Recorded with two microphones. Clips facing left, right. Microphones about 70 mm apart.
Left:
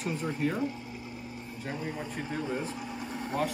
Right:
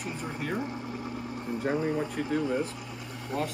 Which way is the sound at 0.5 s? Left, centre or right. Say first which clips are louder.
Even; right.